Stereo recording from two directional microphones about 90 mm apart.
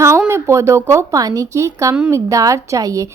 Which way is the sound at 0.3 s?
30° right (ahead or behind).